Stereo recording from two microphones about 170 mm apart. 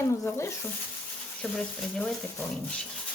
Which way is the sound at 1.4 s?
5° left (ahead or behind).